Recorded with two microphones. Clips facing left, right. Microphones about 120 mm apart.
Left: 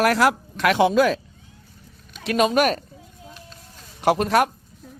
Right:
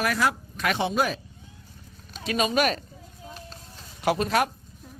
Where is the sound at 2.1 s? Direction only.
60° left (ahead or behind).